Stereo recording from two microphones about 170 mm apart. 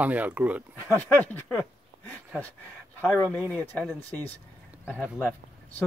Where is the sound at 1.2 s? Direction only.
10° left (ahead or behind).